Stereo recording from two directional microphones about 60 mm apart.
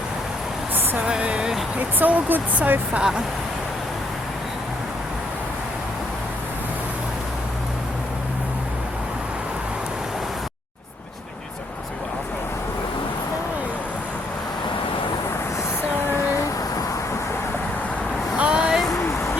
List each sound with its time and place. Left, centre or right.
1.0 s speech: centre
2.0 s speech: right
18.3 s a sound: centre